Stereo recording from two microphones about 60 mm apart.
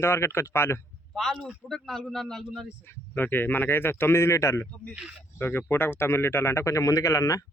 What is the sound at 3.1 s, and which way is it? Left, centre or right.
Speech, left.